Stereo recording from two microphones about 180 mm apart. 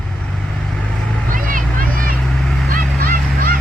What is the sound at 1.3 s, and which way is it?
Vehicle, 50° right (ahead or behind).